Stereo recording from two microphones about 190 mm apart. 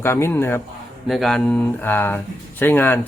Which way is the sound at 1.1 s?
Centre (ahead or behind).